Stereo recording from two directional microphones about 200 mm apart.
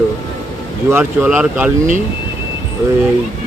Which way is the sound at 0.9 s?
10° right (ahead or behind).